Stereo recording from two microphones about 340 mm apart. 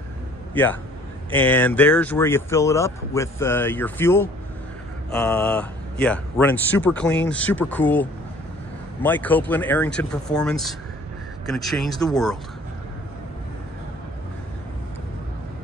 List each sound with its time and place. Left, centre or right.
1.3 s speech: centre